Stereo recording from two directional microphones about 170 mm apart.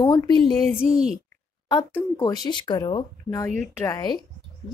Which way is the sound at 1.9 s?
20° left (ahead or behind).